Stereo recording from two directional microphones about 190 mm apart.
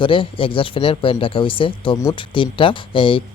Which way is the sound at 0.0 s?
25° left (ahead or behind).